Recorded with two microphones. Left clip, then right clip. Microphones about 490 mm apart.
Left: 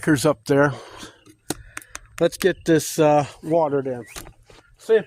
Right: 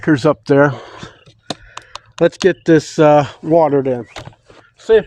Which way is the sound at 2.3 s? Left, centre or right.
Left.